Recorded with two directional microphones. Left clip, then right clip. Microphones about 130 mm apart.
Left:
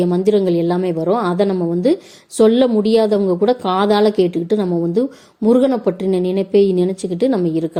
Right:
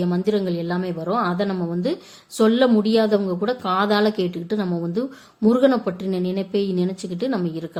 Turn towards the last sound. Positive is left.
turn(degrees=35)  # may be behind; listen again after turning